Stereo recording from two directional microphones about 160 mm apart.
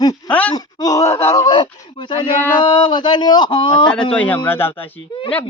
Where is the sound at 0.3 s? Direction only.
10° left (ahead or behind).